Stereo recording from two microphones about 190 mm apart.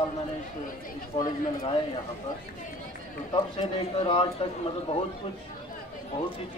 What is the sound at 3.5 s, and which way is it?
Speech, 25° left (ahead or behind).